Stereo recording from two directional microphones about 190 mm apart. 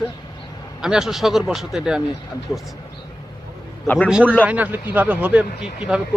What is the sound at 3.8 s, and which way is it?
Speech, 10° left (ahead or behind).